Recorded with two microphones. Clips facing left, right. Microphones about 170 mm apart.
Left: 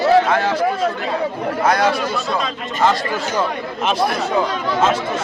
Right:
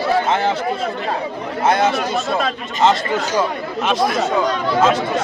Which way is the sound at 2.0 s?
45° right (ahead or behind).